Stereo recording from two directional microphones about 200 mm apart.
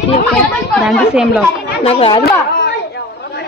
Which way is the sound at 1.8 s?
30° left (ahead or behind).